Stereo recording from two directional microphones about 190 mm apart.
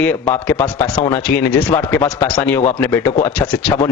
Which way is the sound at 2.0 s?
25° left (ahead or behind).